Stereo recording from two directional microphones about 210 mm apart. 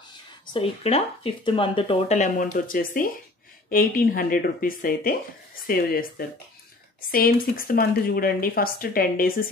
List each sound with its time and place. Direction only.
0.5 s speech: 30° left (ahead or behind); by 9.3 s 45° left (ahead or behind)